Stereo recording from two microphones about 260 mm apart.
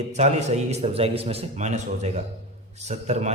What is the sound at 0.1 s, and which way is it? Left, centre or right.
A man's voice, right.